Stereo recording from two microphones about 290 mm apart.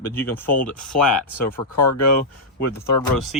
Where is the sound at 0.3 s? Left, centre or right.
Centre.